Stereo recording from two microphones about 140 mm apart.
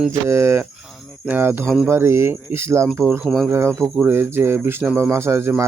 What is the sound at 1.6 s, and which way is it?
Speech, 5° right (ahead or behind).